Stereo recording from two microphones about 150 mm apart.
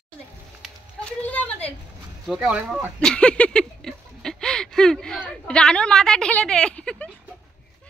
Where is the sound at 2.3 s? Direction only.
5° right (ahead or behind).